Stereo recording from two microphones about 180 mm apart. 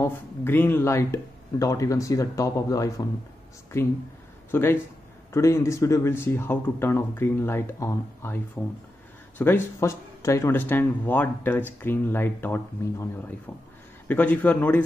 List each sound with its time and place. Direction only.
0.0 s speech: 10° left (ahead or behind)
4.5 s speech: 10° left (ahead or behind)
9.4 s speech: 10° left (ahead or behind)